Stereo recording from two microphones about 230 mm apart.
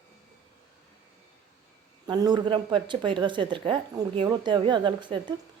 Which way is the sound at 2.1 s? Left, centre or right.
Centre.